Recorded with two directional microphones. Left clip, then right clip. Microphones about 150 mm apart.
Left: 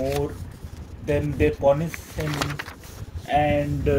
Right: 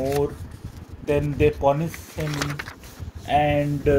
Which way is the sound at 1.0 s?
45° right (ahead or behind).